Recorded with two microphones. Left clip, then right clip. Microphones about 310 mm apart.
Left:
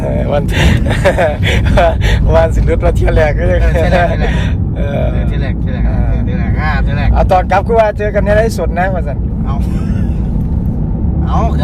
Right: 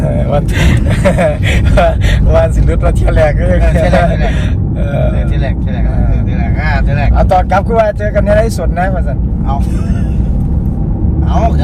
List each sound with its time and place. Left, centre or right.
0.1 s speech: left
7.2 s speech: left